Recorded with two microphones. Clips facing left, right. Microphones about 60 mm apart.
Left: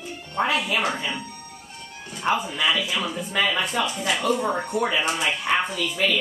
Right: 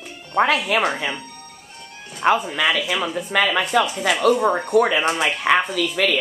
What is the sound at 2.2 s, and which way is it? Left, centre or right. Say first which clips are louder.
Speech: right 6 dB; right.